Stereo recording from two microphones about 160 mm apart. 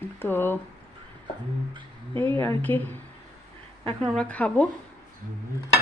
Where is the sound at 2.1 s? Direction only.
15° left (ahead or behind).